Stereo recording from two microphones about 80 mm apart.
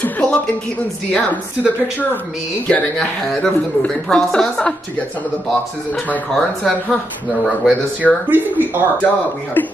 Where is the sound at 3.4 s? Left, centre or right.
Centre.